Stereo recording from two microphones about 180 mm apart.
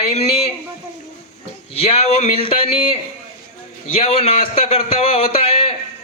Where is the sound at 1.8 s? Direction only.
35° left (ahead or behind).